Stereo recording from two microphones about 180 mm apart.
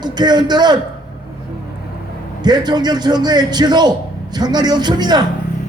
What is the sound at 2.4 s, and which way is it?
A man's voice, 25° right (ahead or behind).